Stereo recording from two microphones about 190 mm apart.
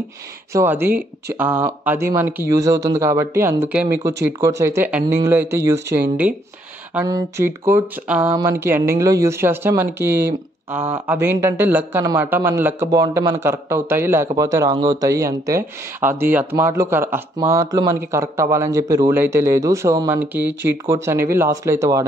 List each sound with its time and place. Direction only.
0.5 s a man's voice: 15° right (ahead or behind)
13.4 s a man's voice: 15° right (ahead or behind)